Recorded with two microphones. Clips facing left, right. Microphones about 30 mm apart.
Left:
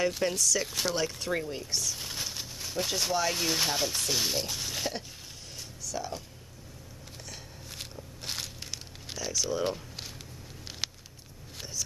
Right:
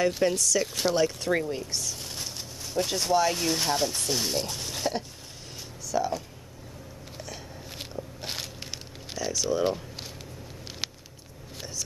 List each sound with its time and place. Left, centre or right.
0.0 s speech: centre
2.0 s speech: centre
5.9 s speech: centre
7.2 s a sound: centre
9.1 s speech: centre